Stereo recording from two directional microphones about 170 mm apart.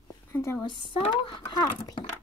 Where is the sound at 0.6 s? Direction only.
30° left (ahead or behind).